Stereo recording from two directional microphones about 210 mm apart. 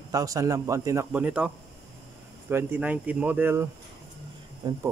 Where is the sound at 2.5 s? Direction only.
10° right (ahead or behind).